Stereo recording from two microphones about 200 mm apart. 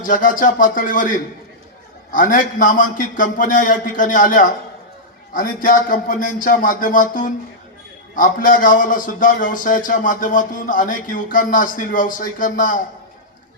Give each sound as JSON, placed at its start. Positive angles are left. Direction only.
{"t": 0.0, "sound": "a man's voice", "side_deg": 40}